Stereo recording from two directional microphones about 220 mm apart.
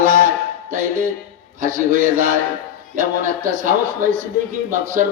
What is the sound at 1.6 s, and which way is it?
A man's voice, 40° right (ahead or behind).